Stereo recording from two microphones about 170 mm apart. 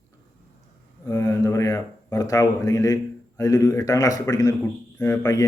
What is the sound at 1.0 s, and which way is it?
A man's voice, 15° left (ahead or behind).